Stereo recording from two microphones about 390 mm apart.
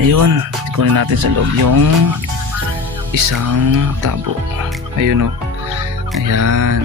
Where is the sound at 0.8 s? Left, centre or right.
Right.